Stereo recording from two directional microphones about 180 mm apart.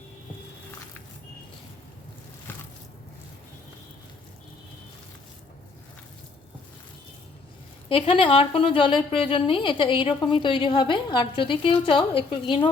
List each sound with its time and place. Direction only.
7.9 s a woman's voice: 30° left (ahead or behind)